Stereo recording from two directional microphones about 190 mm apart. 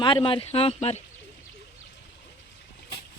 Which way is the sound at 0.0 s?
25° left (ahead or behind).